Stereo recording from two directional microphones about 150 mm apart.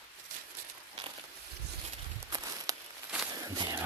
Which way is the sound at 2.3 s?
25° right (ahead or behind).